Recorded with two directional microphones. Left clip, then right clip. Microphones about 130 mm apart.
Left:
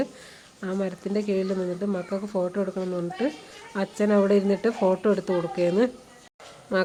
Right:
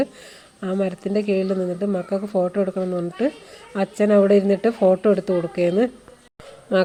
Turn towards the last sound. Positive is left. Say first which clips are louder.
# right 6 dB
turn(degrees=-20)  # may be behind; listen again after turning